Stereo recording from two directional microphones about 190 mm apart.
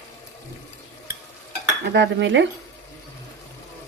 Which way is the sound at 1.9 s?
65° right (ahead or behind).